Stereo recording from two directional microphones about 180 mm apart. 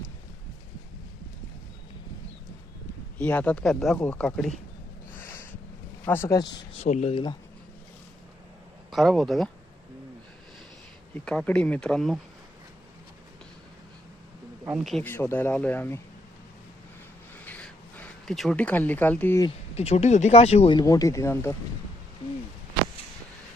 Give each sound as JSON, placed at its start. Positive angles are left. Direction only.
{"t": 3.2, "sound": "a man's voice", "side_deg": 10}
{"t": 5.1, "sound": "a sound", "side_deg": 15}
{"t": 6.1, "sound": "a man's voice", "side_deg": 15}
{"t": 6.7, "sound": "speech", "side_deg": 40}
{"t": 8.9, "sound": "speech", "side_deg": 0}
{"t": 11.1, "sound": "speech", "side_deg": 5}
{"t": 15.0, "sound": "a man's voice", "side_deg": 10}
{"t": 17.4, "sound": "a sound", "side_deg": 10}
{"t": 19.7, "sound": "speech", "side_deg": 35}